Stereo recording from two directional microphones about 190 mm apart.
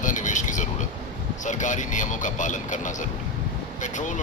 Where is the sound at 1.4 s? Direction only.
40° left (ahead or behind).